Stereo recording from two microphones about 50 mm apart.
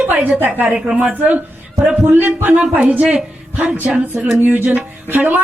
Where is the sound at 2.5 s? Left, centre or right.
Right.